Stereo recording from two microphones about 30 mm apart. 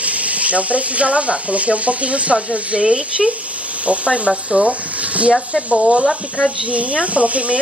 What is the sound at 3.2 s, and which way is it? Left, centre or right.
Speech, centre.